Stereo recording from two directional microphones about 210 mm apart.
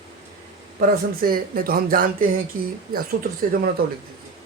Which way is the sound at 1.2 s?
45° right (ahead or behind).